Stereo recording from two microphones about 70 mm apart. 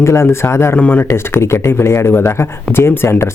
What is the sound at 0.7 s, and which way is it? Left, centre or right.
Speech, left.